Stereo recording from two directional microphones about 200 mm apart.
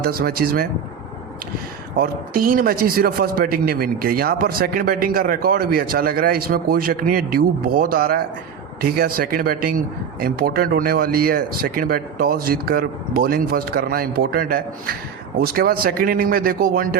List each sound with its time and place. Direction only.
0.0 s a man's voice: 50° right (ahead or behind)
2.0 s a man's voice: 45° right (ahead or behind)